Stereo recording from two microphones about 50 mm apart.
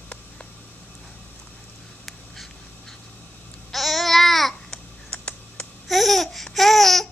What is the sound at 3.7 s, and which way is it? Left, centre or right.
Babbling, centre.